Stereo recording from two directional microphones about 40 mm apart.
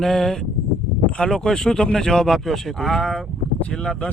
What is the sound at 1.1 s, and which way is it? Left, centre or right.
Speech, left.